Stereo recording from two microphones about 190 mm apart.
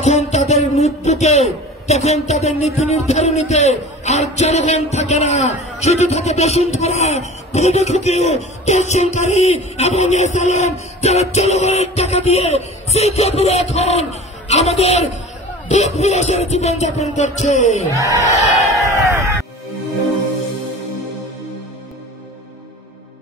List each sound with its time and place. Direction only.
0.0 s a man's voice: 35° left (ahead or behind)
18.3 s crowd: 15° left (ahead or behind)
18.9 s a sound: 15° right (ahead or behind)